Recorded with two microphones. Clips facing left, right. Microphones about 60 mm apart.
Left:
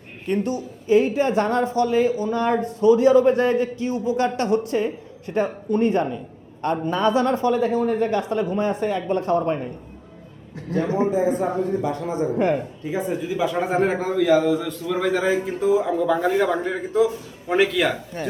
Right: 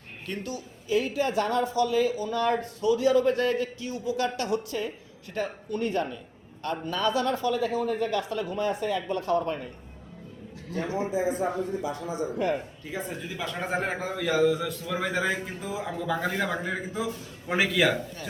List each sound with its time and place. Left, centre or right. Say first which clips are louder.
0.3 s a woman's voice: left 11 dB; left
10.7 s a man's voice: left 8 dB; left
13.2 s a man's voice: left 10 dB; centre